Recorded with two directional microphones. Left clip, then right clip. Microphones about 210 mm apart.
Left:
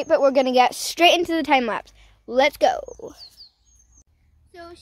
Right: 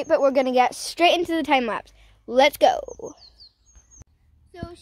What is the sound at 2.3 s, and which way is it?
Speech, 5° right (ahead or behind).